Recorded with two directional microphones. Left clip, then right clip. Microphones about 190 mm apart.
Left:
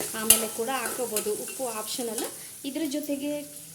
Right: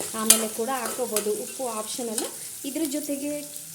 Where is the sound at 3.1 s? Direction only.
15° right (ahead or behind).